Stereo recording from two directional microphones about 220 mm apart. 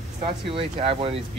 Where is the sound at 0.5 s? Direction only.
25° right (ahead or behind).